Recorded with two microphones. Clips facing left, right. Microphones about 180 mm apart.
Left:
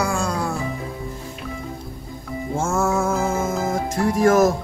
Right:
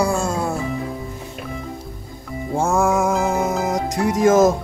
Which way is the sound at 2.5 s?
15° right (ahead or behind).